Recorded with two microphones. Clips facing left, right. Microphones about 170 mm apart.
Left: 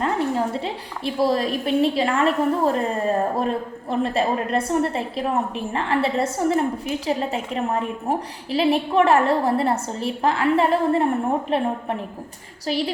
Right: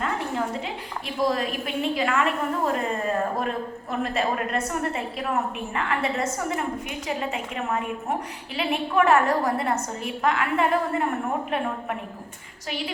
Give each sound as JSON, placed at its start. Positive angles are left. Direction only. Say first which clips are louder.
{"t": 0.0, "sound": "a woman's voice", "louder": "left 5 dB", "side_deg": 35}